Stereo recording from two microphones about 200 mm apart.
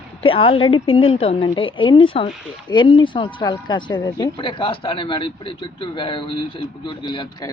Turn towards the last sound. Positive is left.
turn(degrees=25)  # may be behind; listen again after turning